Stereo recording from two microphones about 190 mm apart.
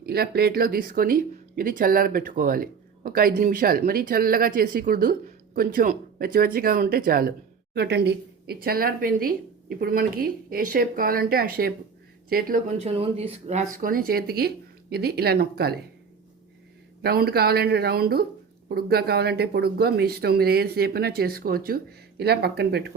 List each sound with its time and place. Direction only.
0.0 s speech: 55° right (ahead or behind)
12.8 s speech: 30° right (ahead or behind)
13.7 s speech: 50° right (ahead or behind)
17.0 s speech: 55° right (ahead or behind)